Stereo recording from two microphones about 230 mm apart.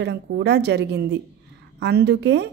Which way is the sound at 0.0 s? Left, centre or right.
Right.